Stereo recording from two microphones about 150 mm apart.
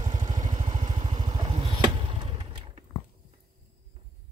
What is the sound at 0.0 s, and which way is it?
Vehicle, 50° right (ahead or behind).